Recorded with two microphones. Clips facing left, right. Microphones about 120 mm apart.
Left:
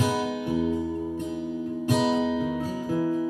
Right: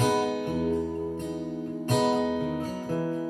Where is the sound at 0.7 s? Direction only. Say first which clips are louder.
Left 1 dB; 5° left (ahead or behind).